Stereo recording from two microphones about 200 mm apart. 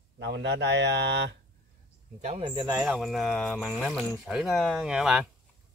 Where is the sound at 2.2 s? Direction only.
30° right (ahead or behind).